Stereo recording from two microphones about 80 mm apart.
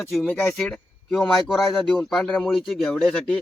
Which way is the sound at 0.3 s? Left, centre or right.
Left.